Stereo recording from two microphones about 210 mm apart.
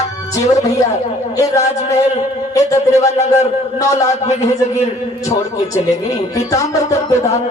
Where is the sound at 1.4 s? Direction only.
15° left (ahead or behind).